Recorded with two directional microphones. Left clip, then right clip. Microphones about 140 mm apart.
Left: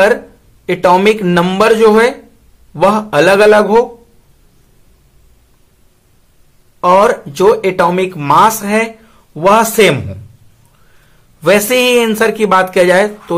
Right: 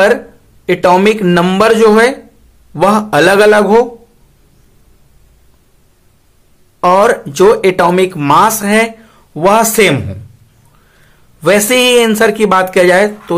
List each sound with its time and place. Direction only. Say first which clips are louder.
0.7 s speech: right 1 dB; 15° right (ahead or behind)
6.8 s speech: even; 25° right (ahead or behind)
11.4 s speech: right 1 dB; 15° right (ahead or behind)